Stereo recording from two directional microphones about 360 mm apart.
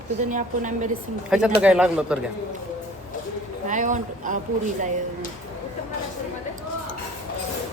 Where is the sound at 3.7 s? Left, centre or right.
Right.